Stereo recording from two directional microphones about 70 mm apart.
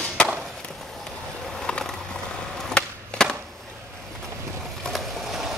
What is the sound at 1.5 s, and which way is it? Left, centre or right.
Skateboard, centre.